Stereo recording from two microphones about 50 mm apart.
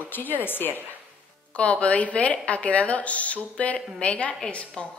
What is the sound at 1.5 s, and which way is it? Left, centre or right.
A woman's voice, left.